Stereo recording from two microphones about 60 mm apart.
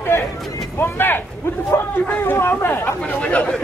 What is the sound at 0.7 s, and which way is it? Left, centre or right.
Vehicle, left.